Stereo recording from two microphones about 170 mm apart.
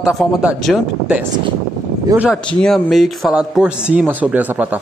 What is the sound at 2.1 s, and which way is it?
Speech, 20° right (ahead or behind).